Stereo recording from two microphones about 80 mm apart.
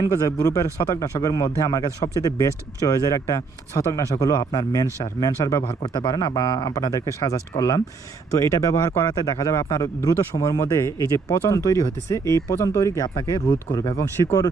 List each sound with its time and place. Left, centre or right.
0.0 s speech: left
6.0 s speech: left
7.5 s speech: left
8.4 s speech: left